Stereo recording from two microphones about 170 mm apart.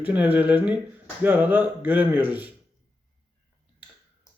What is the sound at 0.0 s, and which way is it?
A man's voice, 10° right (ahead or behind).